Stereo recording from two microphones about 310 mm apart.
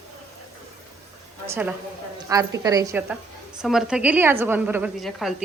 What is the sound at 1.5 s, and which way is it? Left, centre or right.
A woman's voice, centre.